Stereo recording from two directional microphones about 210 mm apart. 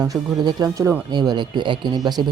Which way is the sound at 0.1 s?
15° right (ahead or behind).